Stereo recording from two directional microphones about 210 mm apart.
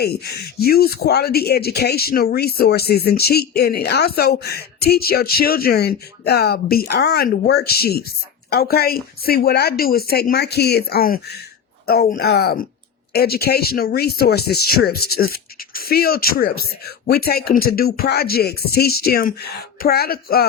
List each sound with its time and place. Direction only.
0.0 s speech: 50° left (ahead or behind)